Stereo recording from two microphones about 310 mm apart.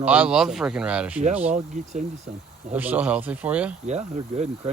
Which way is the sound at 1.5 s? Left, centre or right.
Right.